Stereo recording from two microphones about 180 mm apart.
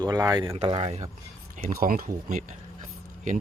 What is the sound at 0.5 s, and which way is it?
Speech, 35° right (ahead or behind).